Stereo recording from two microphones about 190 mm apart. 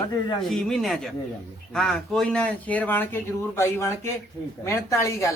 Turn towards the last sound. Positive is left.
turn(degrees=15)  # may be behind; listen again after turning